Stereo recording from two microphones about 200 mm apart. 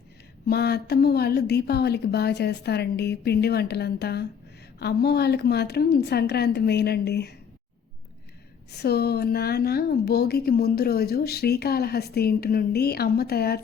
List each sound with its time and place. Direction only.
0.4 s a woman's voice: 55° left (ahead or behind)
8.7 s a woman's voice: 55° left (ahead or behind)